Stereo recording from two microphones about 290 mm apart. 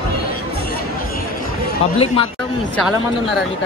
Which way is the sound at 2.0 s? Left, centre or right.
Centre.